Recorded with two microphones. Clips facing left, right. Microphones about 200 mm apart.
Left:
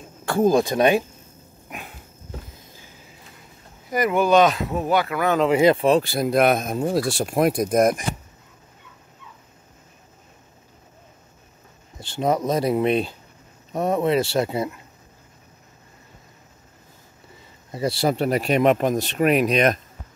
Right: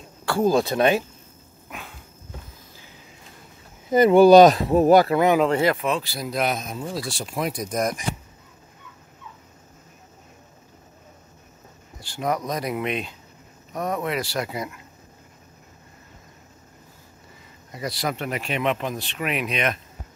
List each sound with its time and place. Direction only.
0.4 s speech: 15° left (ahead or behind)
3.9 s speech: 30° right (ahead or behind)
5.1 s speech: 20° right (ahead or behind)
5.5 s speech: 15° left (ahead or behind)
5.8 s speech: 35° left (ahead or behind)
6.0 s speech: 55° left (ahead or behind)
12.0 s speech: 25° left (ahead or behind)
17.6 s speech: 30° left (ahead or behind)